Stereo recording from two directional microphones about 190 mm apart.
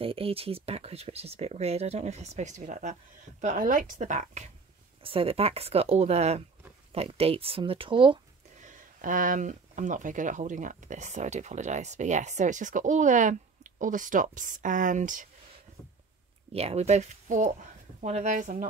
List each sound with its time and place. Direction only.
0.0 s speech: 30° right (ahead or behind)
8.6 s speech: 45° right (ahead or behind)
16.5 s speech: 35° right (ahead or behind)